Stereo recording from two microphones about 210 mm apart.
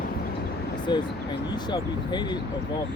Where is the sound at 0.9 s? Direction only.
20° left (ahead or behind).